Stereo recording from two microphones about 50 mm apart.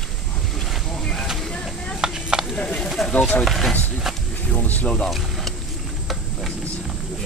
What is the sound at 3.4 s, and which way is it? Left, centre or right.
Speech, centre.